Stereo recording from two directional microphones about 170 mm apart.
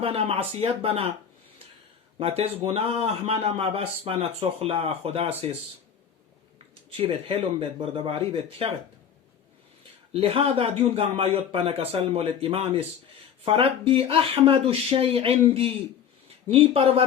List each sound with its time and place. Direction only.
0.0 s a man's voice: 35° right (ahead or behind)
2.1 s a man's voice: 35° right (ahead or behind)
6.9 s a man's voice: 35° right (ahead or behind)
10.1 s a man's voice: 35° right (ahead or behind)